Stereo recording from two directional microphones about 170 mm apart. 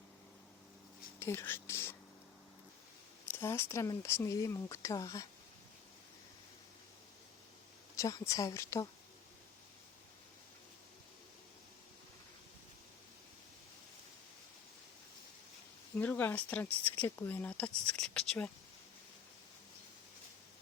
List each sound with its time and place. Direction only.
1.2 s speech: 15° left (ahead or behind)
3.2 s speech: 15° left (ahead or behind)
7.9 s speech: 20° left (ahead or behind)
16.0 s speech: 10° left (ahead or behind)